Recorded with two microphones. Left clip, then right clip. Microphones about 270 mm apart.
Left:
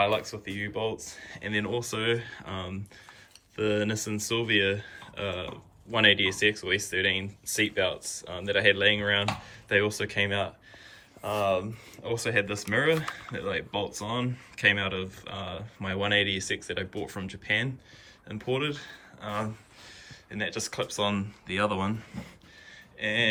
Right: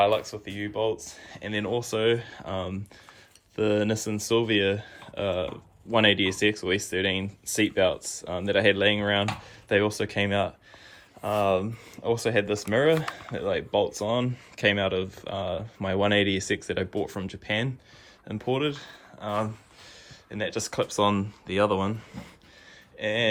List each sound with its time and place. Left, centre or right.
0.0 s speech: centre